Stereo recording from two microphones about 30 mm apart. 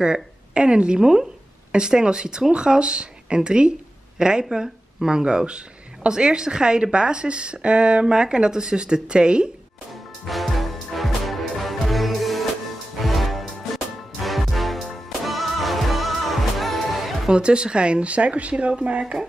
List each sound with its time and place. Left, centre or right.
0.0 s a woman's voice: right
10.2 s music: centre
17.3 s a woman's voice: right